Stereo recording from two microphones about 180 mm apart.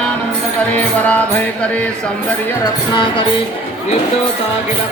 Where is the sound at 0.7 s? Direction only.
10° left (ahead or behind).